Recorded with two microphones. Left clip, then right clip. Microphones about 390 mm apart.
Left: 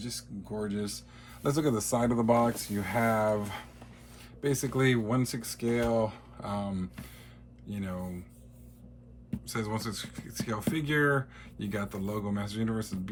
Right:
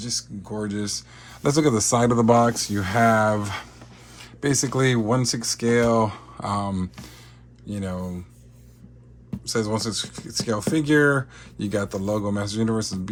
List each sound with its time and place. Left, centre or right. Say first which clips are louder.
0.0 s speech: right 11 dB; centre
9.5 s speech: right 10 dB; centre